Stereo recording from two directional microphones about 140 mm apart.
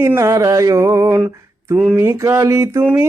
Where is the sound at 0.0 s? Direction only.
20° right (ahead or behind).